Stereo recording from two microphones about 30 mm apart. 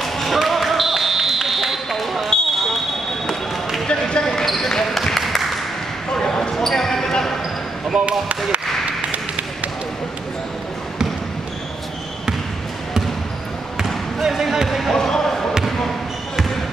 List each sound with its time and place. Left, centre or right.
0.0 s basketball bounce: centre
0.8 s run: centre
1.9 s basketball bounce: centre
2.2 s basketball bounce: centre
3.8 s basketball bounce: left
4.6 s basketball bounce: centre
5.2 s a sound: centre
6.1 s basketball bounce: left
6.5 s basketball bounce: centre
7.9 s basketball bounce: right
14.2 s basketball bounce: centre
14.8 s basketball bounce: centre